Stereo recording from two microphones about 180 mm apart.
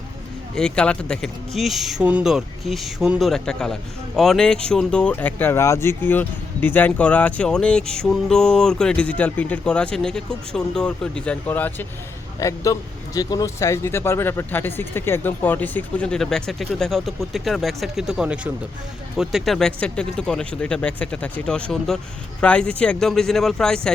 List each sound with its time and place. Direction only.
0.5 s speech: 5° left (ahead or behind)